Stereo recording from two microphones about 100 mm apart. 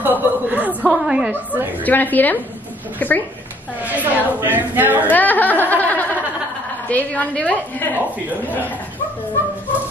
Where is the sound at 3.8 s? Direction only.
15° right (ahead or behind).